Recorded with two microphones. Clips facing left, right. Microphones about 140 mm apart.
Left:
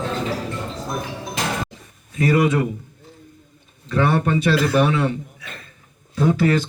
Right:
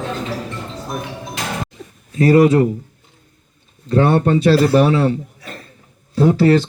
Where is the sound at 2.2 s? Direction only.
30° right (ahead or behind).